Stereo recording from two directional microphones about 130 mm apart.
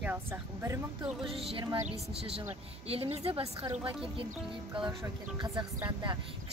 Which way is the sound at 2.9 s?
50° right (ahead or behind).